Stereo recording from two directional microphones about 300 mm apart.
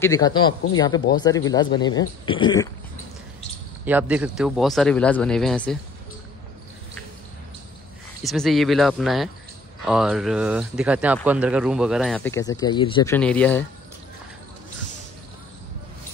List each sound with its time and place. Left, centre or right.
0.0 s speech: centre
3.8 s speech: centre
8.2 s speech: centre